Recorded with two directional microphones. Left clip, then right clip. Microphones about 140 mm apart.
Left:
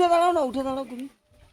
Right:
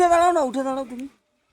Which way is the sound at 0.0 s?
90° right.